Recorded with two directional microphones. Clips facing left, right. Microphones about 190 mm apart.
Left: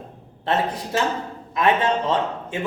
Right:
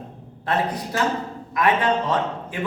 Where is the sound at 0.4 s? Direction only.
25° left (ahead or behind).